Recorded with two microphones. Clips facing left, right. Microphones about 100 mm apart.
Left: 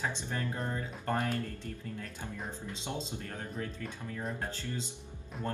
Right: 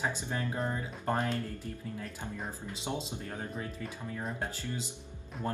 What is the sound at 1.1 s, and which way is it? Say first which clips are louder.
Speech: even; 25° right (ahead or behind).